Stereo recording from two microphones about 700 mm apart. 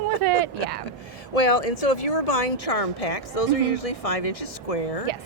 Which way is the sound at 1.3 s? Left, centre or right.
Left.